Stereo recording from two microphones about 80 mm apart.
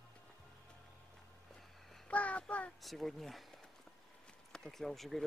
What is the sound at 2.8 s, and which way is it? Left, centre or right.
Speech, centre.